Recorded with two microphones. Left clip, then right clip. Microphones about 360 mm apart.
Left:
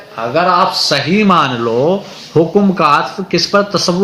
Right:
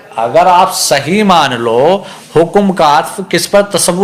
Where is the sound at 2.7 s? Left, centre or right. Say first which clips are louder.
Right 3 dB; centre.